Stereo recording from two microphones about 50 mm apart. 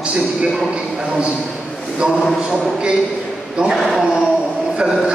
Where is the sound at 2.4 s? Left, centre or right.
Centre.